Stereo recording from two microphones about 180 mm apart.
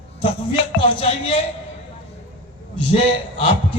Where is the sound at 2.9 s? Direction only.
35° left (ahead or behind).